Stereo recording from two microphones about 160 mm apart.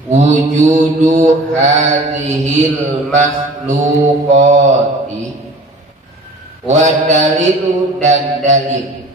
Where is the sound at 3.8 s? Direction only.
45° right (ahead or behind).